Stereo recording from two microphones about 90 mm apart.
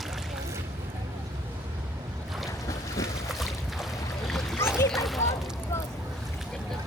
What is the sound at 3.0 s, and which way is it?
Boat, 35° left (ahead or behind).